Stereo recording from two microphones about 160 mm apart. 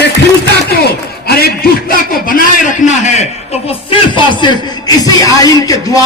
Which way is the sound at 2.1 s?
60° left (ahead or behind).